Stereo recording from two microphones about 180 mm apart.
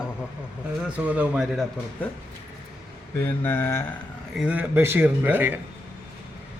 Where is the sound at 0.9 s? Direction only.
10° right (ahead or behind).